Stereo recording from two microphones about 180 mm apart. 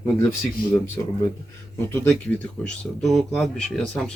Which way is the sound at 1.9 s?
10° left (ahead or behind).